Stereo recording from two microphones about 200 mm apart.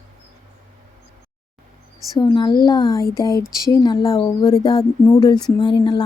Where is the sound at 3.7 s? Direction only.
20° left (ahead or behind).